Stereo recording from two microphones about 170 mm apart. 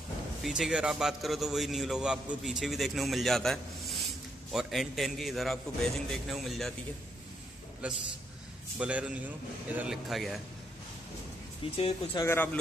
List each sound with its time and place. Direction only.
0.4 s a man's voice: 5° right (ahead or behind)
8.7 s a man's voice: 5° right (ahead or behind)
11.7 s speech: 30° left (ahead or behind)
12.2 s speech: 15° left (ahead or behind)